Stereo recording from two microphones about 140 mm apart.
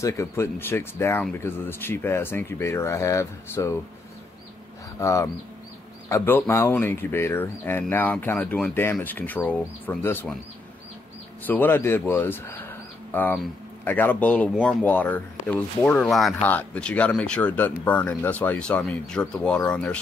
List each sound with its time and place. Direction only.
0.0 s speech: 20° left (ahead or behind)
4.9 s speech: 20° left (ahead or behind)
11.4 s speech: 15° left (ahead or behind)